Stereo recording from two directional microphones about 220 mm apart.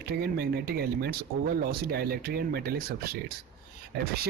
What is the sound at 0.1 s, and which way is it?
Speech, 45° right (ahead or behind).